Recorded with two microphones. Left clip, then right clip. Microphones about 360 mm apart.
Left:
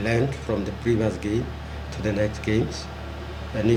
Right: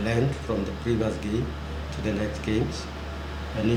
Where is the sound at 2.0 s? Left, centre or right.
Left.